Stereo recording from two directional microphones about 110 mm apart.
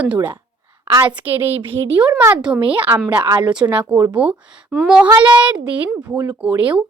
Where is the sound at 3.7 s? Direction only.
15° right (ahead or behind).